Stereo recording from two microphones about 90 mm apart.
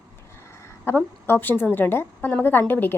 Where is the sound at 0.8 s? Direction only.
25° left (ahead or behind).